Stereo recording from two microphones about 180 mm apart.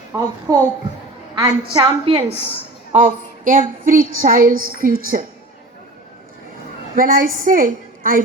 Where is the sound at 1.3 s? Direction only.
25° right (ahead or behind).